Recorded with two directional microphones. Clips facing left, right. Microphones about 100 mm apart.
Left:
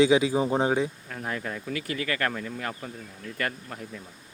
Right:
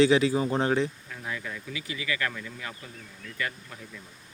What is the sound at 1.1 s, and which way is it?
Speech, 45° left (ahead or behind).